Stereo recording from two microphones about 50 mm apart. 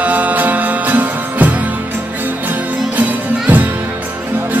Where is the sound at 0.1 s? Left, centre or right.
Right.